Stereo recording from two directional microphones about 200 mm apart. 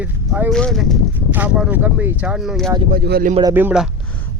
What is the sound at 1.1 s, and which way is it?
Speech, 10° right (ahead or behind).